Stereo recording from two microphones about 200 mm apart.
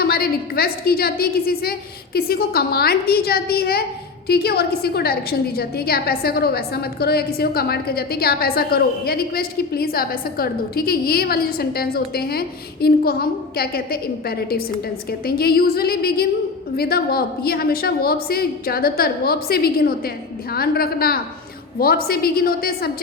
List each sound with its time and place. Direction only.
0.1 s a woman's voice: 50° left (ahead or behind)